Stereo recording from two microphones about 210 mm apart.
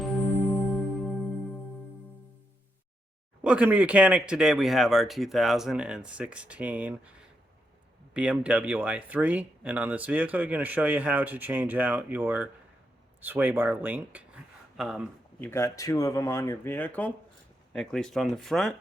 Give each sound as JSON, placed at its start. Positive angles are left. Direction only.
{"t": 0.0, "sound": "music", "side_deg": 0}
{"t": 3.4, "sound": "speech", "side_deg": -5}
{"t": 15.4, "sound": "speech", "side_deg": 15}